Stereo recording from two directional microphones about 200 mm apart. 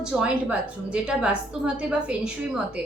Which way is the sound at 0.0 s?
5° right (ahead or behind).